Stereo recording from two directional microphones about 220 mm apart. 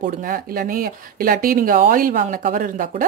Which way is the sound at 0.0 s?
40° right (ahead or behind).